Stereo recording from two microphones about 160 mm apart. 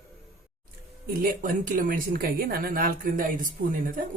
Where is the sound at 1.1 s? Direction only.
60° right (ahead or behind).